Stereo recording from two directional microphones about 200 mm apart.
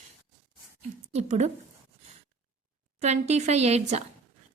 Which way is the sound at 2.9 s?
35° right (ahead or behind).